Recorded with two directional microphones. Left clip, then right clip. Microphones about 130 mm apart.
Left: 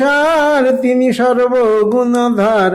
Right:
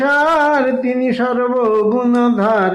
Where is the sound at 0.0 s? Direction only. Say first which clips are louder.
Left 2 dB; 45° left (ahead or behind).